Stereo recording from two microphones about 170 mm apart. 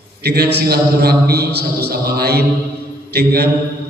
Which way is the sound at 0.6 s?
65° right (ahead or behind).